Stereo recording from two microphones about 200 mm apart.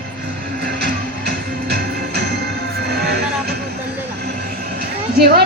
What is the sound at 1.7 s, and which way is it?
Music, 50° right (ahead or behind).